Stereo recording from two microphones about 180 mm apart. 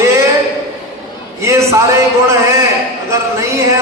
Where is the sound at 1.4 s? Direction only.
15° right (ahead or behind).